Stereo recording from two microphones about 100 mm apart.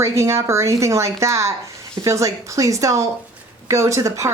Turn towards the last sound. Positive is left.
turn(degrees=-30)  # may be behind; listen again after turning